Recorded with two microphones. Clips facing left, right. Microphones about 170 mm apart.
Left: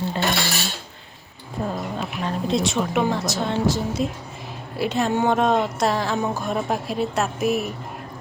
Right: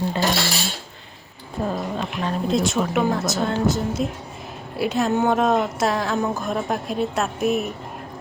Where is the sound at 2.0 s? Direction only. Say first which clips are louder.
Right 1 dB; centre (ahead or behind).